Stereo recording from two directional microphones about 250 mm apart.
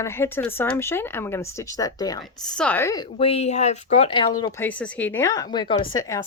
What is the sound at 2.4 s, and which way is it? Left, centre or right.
A woman's voice, centre.